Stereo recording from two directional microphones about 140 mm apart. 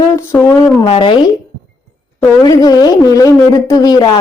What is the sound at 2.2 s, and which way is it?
A woman's voice, 25° left (ahead or behind).